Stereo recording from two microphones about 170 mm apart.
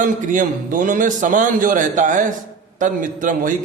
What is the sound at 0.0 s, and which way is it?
Speech, 50° right (ahead or behind).